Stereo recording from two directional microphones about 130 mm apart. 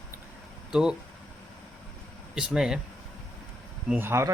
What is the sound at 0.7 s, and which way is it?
Speech, 5° right (ahead or behind).